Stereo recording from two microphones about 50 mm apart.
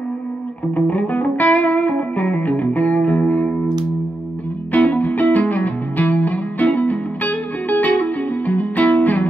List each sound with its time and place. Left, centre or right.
0.7 s music: left
4.7 s music: left